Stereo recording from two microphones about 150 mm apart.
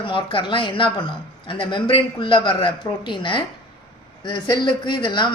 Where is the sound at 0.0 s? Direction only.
35° left (ahead or behind).